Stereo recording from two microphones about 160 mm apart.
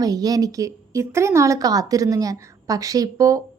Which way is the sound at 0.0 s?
25° right (ahead or behind).